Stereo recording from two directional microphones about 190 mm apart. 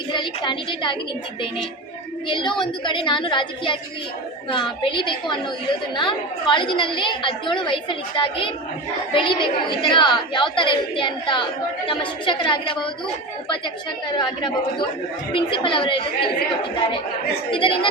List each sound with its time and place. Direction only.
0.1 s a woman's voice: 25° left (ahead or behind)
2.2 s a woman's voice: 25° left (ahead or behind)
14.2 s a woman's voice: 25° left (ahead or behind)
17.5 s a woman's voice: 25° left (ahead or behind)